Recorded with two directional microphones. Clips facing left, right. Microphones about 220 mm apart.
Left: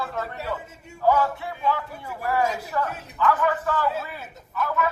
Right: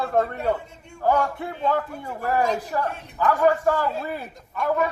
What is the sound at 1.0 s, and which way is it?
Speech, 50° right (ahead or behind).